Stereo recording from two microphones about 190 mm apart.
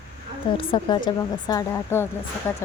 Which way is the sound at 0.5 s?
25° left (ahead or behind).